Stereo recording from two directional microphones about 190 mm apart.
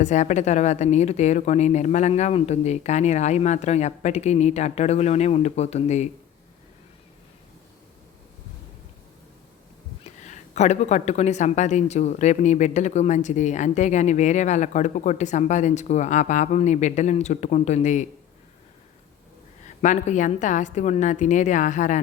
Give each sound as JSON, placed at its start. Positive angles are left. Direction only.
{"t": 0.0, "sound": "speech", "side_deg": 40}
{"t": 10.0, "sound": "speech", "side_deg": 40}
{"t": 19.6, "sound": "speech", "side_deg": 40}